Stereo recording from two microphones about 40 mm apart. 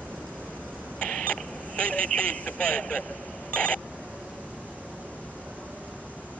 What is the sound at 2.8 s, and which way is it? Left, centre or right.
Speech, left.